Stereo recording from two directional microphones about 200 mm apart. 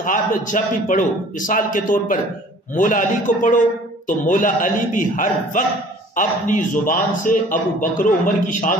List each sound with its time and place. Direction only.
0.0 s a man's voice: 40° left (ahead or behind)